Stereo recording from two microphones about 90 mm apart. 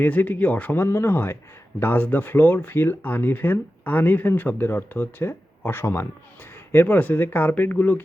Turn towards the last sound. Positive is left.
turn(degrees=20)  # may be behind; listen again after turning